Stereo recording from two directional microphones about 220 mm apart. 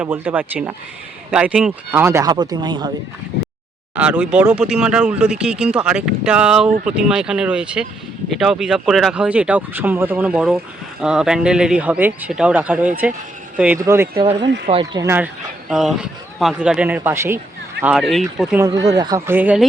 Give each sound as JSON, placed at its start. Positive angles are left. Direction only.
{"t": 0.0, "sound": "speech", "side_deg": -10}
{"t": 3.9, "sound": "speech", "side_deg": -5}
{"t": 14.7, "sound": "speech", "side_deg": -25}
{"t": 15.0, "sound": "speech", "side_deg": -10}
{"t": 18.6, "sound": "speech", "side_deg": -15}